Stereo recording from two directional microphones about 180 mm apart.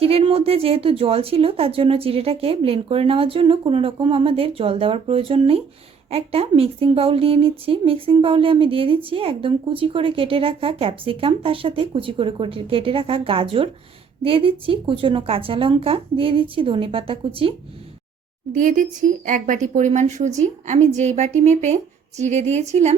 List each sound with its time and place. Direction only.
0.0 s a woman's voice: 30° right (ahead or behind)
18.5 s a woman's voice: 45° right (ahead or behind)